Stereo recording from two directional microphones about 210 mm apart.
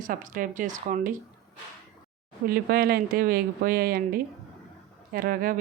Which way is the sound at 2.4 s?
45° right (ahead or behind).